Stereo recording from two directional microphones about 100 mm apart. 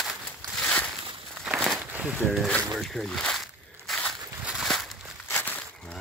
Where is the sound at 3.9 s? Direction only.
5° left (ahead or behind).